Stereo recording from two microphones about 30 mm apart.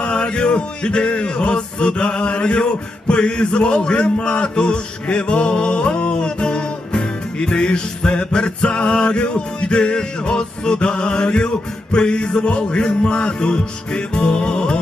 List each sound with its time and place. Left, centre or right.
0.0 s music: left